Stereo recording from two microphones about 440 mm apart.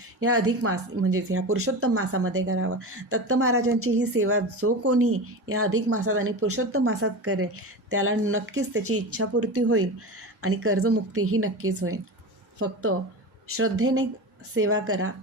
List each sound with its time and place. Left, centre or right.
0.2 s a woman's voice: right